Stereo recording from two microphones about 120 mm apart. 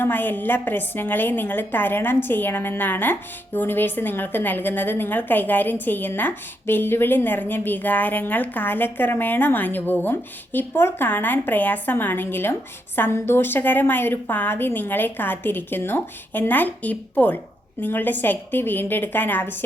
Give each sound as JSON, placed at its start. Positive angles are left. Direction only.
{"t": 0.0, "sound": "a woman's voice", "side_deg": 15}